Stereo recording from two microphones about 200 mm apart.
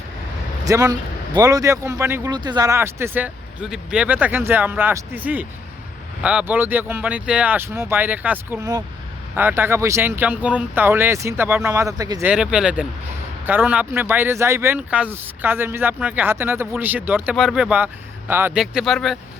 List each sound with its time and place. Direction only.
0.6 s speech: 15° right (ahead or behind)
12.3 s speech: 5° right (ahead or behind)